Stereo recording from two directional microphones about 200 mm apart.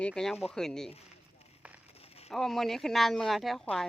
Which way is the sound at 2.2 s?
Centre (ahead or behind).